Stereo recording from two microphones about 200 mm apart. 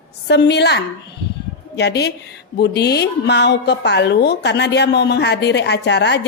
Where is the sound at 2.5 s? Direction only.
55° left (ahead or behind).